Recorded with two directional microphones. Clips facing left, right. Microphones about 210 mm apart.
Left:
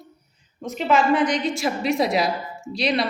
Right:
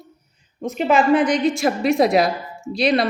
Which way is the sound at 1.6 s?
50° right (ahead or behind).